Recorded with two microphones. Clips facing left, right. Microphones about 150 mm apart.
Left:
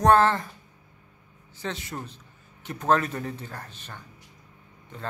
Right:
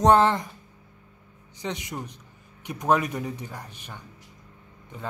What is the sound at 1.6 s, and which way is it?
Speech, 15° right (ahead or behind).